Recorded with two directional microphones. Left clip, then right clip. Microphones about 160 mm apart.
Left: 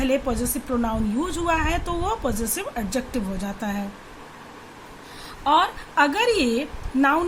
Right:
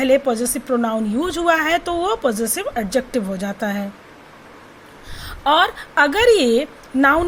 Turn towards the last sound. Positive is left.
turn(degrees=-40)  # may be behind; listen again after turning